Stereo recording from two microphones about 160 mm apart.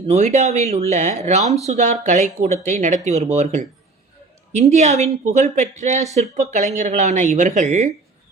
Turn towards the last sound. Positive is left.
turn(degrees=-50)  # may be behind; listen again after turning